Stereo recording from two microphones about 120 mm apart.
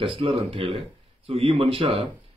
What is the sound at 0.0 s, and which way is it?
Speech, 50° right (ahead or behind).